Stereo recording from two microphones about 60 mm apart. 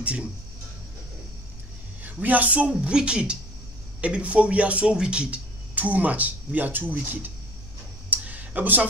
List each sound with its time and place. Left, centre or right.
0.0 s speech: right
2.2 s speech: right
2.7 s speech: centre; by 7.2 s right
8.1 s a sound: right